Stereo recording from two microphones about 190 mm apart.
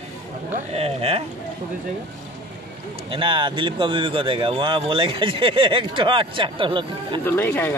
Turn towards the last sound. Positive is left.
turn(degrees=10)  # may be behind; listen again after turning